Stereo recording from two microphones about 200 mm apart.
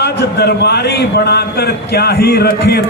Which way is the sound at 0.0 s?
55° left (ahead or behind).